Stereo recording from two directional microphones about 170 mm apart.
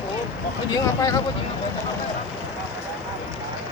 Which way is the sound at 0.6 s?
20° left (ahead or behind).